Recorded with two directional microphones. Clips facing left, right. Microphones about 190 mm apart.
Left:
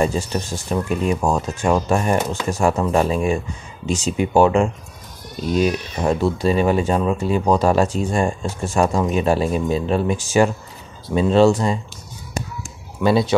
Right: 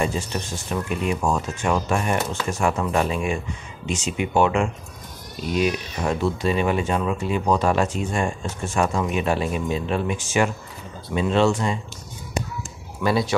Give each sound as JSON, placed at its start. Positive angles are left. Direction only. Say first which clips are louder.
{"t": 0.0, "sound": "speech", "louder": "left 4 dB", "side_deg": 35}
{"t": 13.0, "sound": "speech", "louder": "left 5 dB", "side_deg": 25}